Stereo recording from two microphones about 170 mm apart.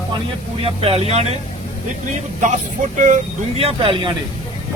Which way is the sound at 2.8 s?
50° right (ahead or behind).